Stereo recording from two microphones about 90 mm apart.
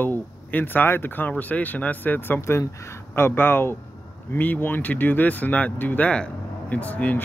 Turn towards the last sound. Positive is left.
turn(degrees=15)  # may be behind; listen again after turning